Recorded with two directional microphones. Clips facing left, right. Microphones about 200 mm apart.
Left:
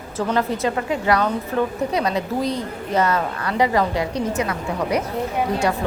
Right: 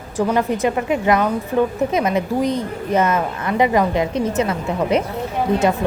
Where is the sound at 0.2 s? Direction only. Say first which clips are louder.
Right 3 dB; 15° right (ahead or behind).